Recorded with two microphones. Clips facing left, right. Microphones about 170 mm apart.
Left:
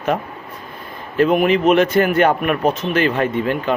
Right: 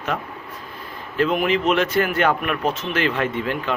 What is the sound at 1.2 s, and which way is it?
A man's voice, 50° left (ahead or behind).